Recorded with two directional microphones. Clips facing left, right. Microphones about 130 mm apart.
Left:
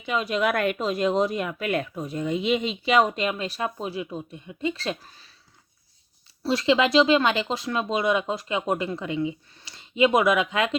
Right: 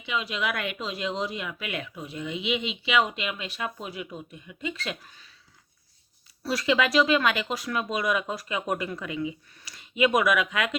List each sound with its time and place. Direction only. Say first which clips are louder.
0.0 s speech: left 6 dB; 45° left (ahead or behind)
6.4 s speech: left 4 dB; 25° left (ahead or behind)